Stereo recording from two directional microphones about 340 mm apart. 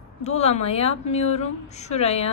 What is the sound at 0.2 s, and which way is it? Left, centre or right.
Speech, centre.